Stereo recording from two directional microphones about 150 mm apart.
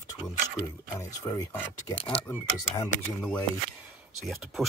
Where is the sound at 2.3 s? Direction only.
15° left (ahead or behind).